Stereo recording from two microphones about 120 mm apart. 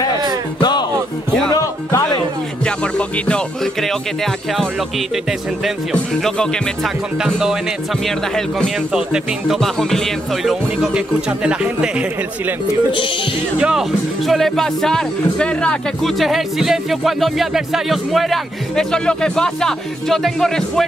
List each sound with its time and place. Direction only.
0.6 s music: 35° left (ahead or behind)
1.5 s speech: 30° left (ahead or behind)
2.6 s music: 10° left (ahead or behind)
5.9 s music: 5° left (ahead or behind)
7.2 s speech: centre (ahead or behind)
8.9 s speech: 5° right (ahead or behind)
9.6 s speech: 5° left (ahead or behind)
12.9 s music: 45° left (ahead or behind)
13.6 s speech: 5° right (ahead or behind)